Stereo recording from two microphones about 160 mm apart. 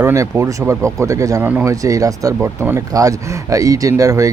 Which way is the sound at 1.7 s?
20° right (ahead or behind).